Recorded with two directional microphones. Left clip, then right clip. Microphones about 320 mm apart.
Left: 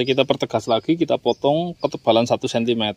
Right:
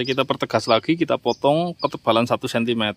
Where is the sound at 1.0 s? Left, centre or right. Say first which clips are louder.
Left 1 dB; centre.